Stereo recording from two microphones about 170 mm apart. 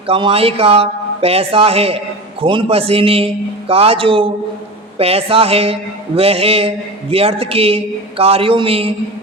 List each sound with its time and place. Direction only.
0.1 s speech: 35° right (ahead or behind)